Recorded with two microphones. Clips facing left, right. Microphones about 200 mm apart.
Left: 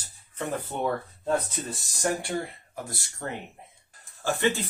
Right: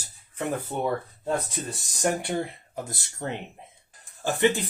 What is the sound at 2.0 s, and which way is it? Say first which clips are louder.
Speech: right 2 dB; 20° right (ahead or behind).